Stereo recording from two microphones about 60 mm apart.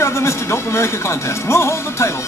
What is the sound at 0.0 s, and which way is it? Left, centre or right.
Speech, left.